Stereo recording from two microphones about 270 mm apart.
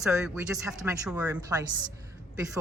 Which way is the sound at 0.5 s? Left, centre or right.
Centre.